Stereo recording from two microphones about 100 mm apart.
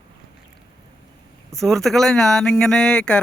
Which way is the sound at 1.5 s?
5° left (ahead or behind).